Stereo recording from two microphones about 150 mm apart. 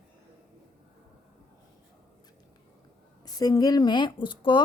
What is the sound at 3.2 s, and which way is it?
A woman's voice, 25° left (ahead or behind).